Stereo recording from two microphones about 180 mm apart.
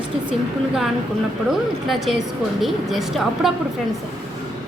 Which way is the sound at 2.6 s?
Centre (ahead or behind).